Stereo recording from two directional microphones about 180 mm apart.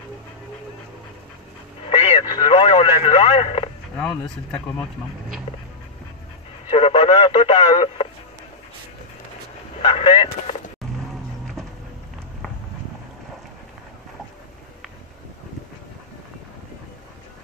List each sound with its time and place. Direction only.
1.9 s radio: 25° left (ahead or behind)
4.0 s speech: 5° left (ahead or behind)
5.5 s dog: 30° left (ahead or behind)
6.7 s speech: 30° left (ahead or behind)
9.8 s speech: 30° left (ahead or behind)